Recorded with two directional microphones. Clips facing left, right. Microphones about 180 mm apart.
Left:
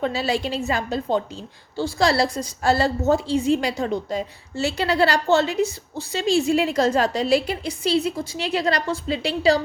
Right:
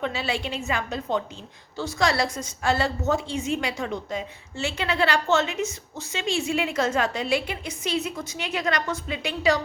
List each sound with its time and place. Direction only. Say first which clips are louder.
0.0 s a woman's voice: left 5 dB; 40° left (ahead or behind)